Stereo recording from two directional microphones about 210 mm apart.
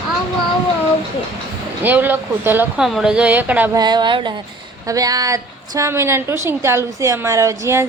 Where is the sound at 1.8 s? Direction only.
10° right (ahead or behind).